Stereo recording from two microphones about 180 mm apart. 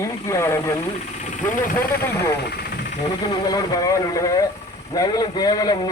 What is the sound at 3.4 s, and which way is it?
A man's voice, 20° left (ahead or behind).